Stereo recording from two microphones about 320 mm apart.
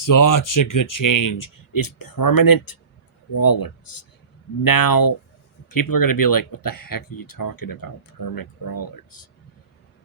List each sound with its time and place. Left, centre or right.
0.0 s speech: left